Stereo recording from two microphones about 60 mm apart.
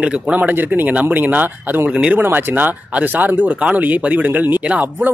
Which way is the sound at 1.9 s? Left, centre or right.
Centre.